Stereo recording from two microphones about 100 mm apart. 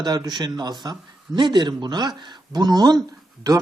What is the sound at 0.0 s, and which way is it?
Speech, 45° right (ahead or behind).